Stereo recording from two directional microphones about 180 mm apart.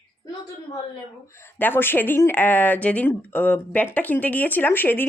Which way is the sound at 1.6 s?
10° left (ahead or behind).